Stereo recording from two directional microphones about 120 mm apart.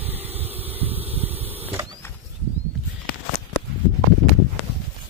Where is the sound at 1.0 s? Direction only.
55° right (ahead or behind).